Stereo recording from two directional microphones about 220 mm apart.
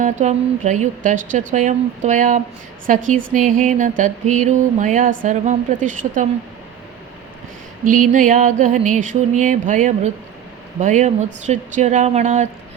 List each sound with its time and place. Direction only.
0.0 s music: 35° right (ahead or behind)
7.9 s music: 35° right (ahead or behind)